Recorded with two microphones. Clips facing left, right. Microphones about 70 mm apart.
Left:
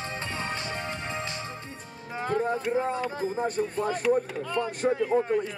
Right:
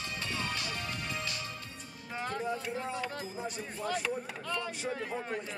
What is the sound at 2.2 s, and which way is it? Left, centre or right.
Music, left.